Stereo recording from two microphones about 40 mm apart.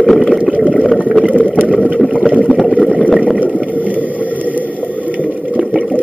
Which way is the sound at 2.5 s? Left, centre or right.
Centre.